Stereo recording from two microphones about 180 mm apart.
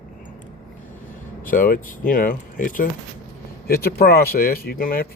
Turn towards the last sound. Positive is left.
turn(degrees=55)  # may be behind; listen again after turning